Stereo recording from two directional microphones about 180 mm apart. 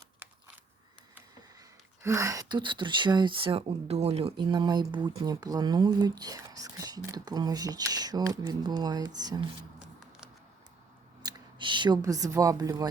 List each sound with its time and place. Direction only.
0.2 s a sound: 10° right (ahead or behind)
1.5 s speech: 15° right (ahead or behind)
11.2 s speech: 20° right (ahead or behind)